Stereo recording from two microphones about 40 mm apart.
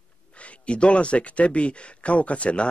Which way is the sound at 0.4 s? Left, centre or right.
Left.